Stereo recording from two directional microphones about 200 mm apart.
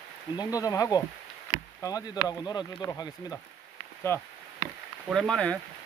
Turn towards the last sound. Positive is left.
turn(degrees=5)  # may be behind; listen again after turning